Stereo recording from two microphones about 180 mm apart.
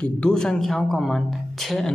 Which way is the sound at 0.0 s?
5° left (ahead or behind).